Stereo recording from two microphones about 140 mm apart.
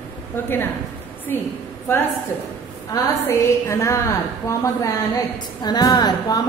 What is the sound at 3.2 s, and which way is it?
Speech, 20° left (ahead or behind).